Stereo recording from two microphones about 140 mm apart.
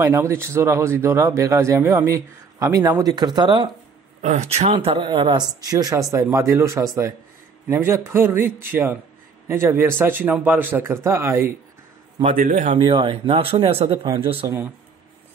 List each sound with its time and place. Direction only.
0.0 s speech: 20° right (ahead or behind)
4.2 s speech: 55° right (ahead or behind)
4.6 s speech: 40° right (ahead or behind); by 11.5 s 20° right (ahead or behind)
12.4 s speech: 70° right (ahead or behind)
12.7 s speech: 40° right (ahead or behind)